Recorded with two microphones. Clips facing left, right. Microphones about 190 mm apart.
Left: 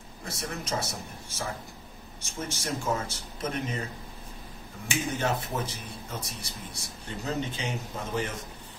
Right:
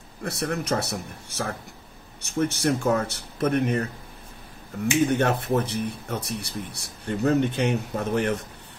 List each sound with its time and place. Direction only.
0.2 s speech: 65° right (ahead or behind)
5.0 s speech: 65° right (ahead or behind)